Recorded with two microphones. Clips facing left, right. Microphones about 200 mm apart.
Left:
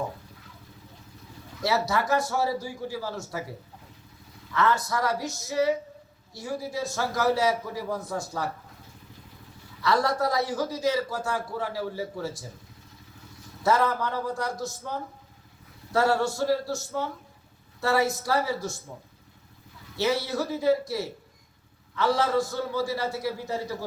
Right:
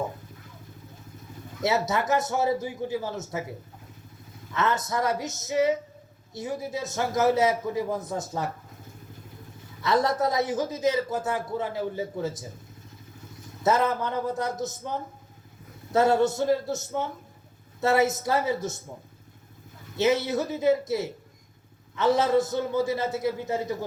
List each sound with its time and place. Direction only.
1.6 s a man's voice: 20° right (ahead or behind)
4.5 s a man's voice: 20° right (ahead or behind)
9.8 s a man's voice: 20° right (ahead or behind)
13.6 s a man's voice: 20° right (ahead or behind)
20.0 s a man's voice: 20° right (ahead or behind)